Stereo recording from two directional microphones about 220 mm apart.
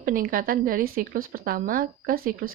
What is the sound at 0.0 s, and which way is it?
A woman's voice, 40° right (ahead or behind).